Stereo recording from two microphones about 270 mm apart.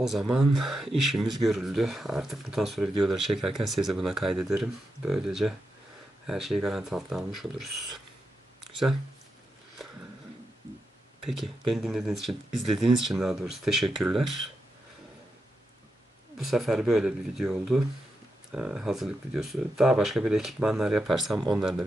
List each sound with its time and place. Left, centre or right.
0.0 s speech: centre
11.7 s speech: centre
14.3 s speech: right
16.4 s speech: centre